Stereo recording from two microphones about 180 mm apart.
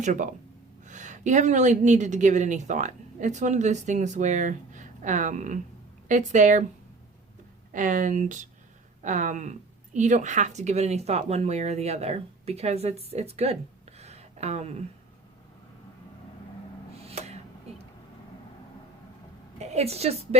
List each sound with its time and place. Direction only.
0.0 s a woman's voice: 45° right (ahead or behind)
7.7 s a woman's voice: 45° right (ahead or behind)
17.1 s a sound: 35° right (ahead or behind)
19.5 s a woman's voice: 35° right (ahead or behind)